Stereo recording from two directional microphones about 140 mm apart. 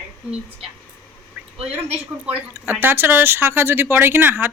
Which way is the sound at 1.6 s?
45° right (ahead or behind).